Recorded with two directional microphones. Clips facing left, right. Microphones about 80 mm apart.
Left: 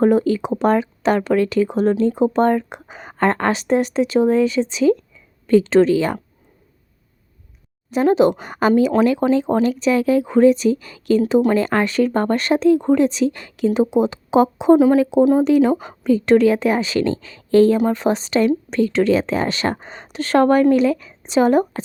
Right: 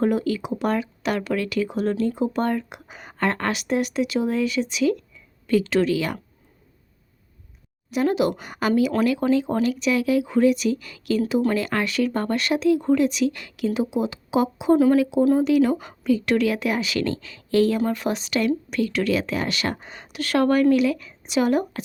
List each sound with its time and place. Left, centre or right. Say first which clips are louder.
0.0 s speech: left 7 dB; left
7.9 s speech: left 6 dB; left
15.2 s speech: left 6 dB; centre
15.4 s speech: left 4 dB; left